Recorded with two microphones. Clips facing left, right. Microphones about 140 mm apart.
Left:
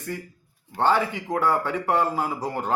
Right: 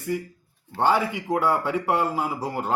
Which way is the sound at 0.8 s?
10° right (ahead or behind).